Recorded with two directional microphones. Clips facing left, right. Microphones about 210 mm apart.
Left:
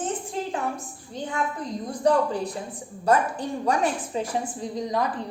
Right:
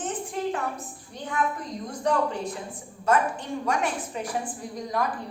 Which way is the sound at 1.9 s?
35° left (ahead or behind).